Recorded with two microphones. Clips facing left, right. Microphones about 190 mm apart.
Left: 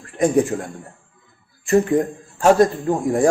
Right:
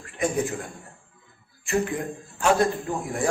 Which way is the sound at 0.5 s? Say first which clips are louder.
Left 8 dB; 45° left (ahead or behind).